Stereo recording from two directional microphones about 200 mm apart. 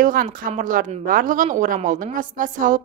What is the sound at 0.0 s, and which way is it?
A woman's voice, 45° right (ahead or behind).